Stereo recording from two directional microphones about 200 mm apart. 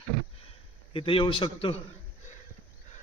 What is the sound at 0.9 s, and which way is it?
Speech, 25° left (ahead or behind).